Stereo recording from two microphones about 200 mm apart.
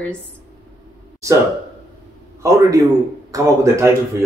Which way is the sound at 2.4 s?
15° right (ahead or behind).